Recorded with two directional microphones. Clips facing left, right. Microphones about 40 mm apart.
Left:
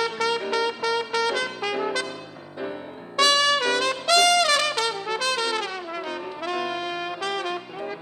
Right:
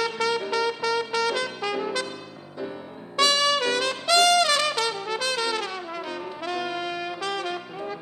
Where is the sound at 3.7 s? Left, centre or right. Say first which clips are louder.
Left 1 dB; left.